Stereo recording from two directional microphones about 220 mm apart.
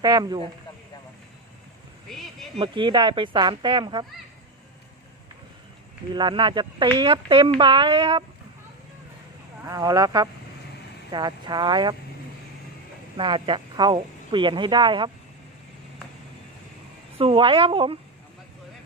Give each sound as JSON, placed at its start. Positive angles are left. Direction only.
{"t": 0.0, "sound": "speech", "side_deg": -15}
{"t": 2.0, "sound": "a sound", "side_deg": 0}
{"t": 2.6, "sound": "speech", "side_deg": -20}
{"t": 6.1, "sound": "speech", "side_deg": -20}
{"t": 9.6, "sound": "speech", "side_deg": -15}
{"t": 13.1, "sound": "speech", "side_deg": -20}
{"t": 17.2, "sound": "speech", "side_deg": -25}